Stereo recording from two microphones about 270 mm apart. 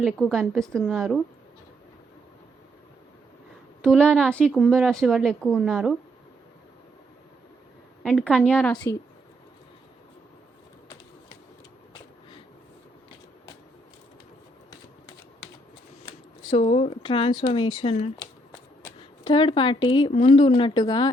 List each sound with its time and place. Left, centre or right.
0.0 s a woman's voice: centre
3.8 s a woman's voice: centre
8.0 s a woman's voice: centre
16.0 s speech: centre